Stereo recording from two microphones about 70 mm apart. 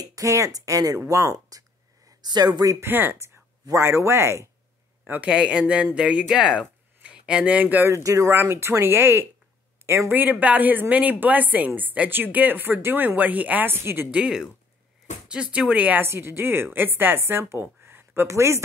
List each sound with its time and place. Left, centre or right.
0.0 s speech: right
2.2 s speech: right
2.8 s speech: right
3.7 s speech: right
5.0 s speech: right
5.3 s speech: centre
7.9 s speech: right
8.4 s speech: right
10.1 s a woman's voice: right
14.1 s a woman's voice: centre
16.1 s a woman's voice: right